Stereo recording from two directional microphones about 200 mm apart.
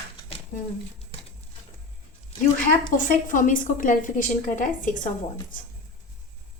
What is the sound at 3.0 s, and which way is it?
A woman's voice, 40° left (ahead or behind).